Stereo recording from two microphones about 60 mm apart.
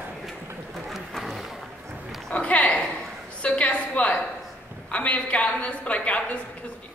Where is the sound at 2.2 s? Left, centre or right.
Left.